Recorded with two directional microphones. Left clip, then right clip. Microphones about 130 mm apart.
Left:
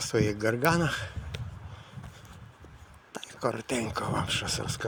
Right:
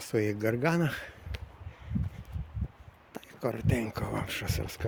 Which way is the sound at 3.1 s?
20° right (ahead or behind).